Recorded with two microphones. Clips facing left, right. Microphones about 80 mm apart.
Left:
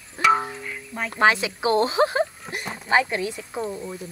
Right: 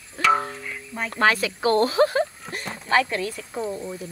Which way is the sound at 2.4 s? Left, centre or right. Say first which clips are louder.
Left 1 dB; centre.